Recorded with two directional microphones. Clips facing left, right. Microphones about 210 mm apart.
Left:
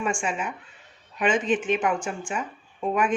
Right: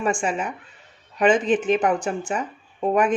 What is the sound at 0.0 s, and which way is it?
A woman's voice, 40° right (ahead or behind).